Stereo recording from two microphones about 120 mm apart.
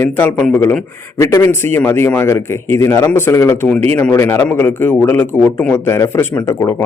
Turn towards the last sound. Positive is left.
turn(degrees=15)  # may be behind; listen again after turning